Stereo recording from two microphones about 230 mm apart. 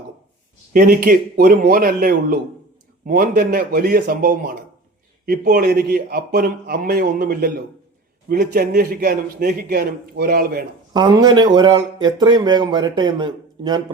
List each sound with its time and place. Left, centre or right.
0.7 s a man's voice: right
10.9 s speech: centre